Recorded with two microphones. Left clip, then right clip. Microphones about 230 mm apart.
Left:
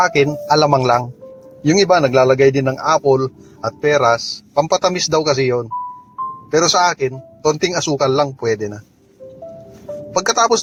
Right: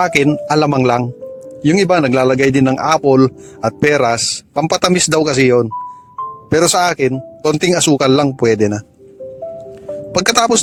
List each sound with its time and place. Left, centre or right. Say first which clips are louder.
0.0 s a man's voice: right 1 dB; right
10.2 s a man's voice: right 2 dB; right